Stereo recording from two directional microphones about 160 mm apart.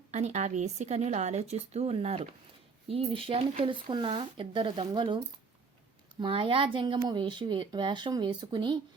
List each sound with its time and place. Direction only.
0.1 s speech: 45° right (ahead or behind)